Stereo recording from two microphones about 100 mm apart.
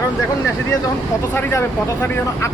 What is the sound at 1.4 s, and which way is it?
Speech, 25° left (ahead or behind).